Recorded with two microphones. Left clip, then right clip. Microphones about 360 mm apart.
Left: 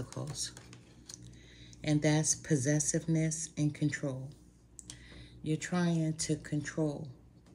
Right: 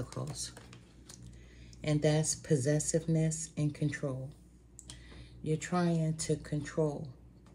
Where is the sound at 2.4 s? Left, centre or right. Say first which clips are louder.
Right 1 dB; right.